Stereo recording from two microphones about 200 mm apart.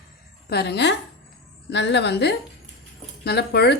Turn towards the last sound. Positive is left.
turn(degrees=55)  # may be behind; listen again after turning